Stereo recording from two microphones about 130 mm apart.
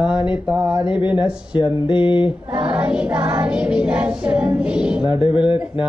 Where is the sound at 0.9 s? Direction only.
40° left (ahead or behind).